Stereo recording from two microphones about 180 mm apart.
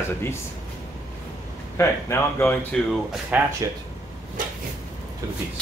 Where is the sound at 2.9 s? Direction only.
Centre (ahead or behind).